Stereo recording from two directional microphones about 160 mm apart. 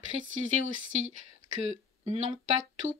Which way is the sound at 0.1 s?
45° right (ahead or behind).